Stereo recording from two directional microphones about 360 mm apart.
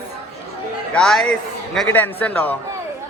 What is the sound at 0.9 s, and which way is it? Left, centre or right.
A man's voice, centre.